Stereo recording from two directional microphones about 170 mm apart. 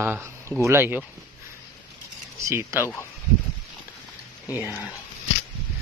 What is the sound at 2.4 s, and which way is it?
Speech, 15° right (ahead or behind).